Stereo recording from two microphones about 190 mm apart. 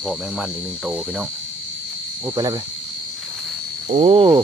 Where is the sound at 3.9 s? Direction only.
40° right (ahead or behind).